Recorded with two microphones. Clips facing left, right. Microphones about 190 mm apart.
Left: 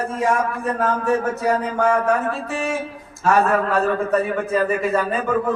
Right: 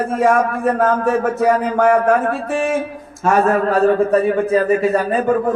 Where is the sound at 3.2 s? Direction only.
35° right (ahead or behind).